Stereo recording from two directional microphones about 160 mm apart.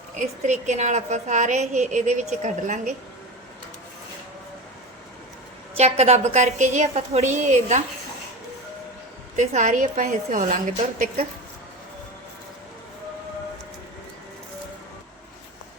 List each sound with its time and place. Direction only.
0.2 s a woman's voice: 50° right (ahead or behind)
5.7 s a woman's voice: 45° right (ahead or behind)
9.3 s a woman's voice: 50° right (ahead or behind)